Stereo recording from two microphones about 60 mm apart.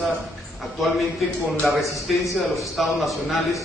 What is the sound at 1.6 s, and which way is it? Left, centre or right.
A man's voice, centre.